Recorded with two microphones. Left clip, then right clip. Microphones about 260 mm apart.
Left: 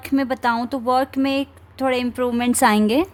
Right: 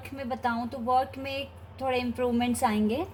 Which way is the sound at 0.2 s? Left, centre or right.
Left.